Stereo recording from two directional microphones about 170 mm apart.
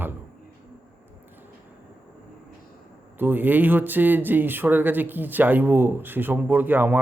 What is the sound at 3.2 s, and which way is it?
Speech, 10° right (ahead or behind).